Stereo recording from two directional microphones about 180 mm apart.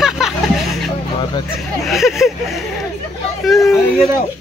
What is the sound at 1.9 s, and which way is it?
Speech, centre (ahead or behind).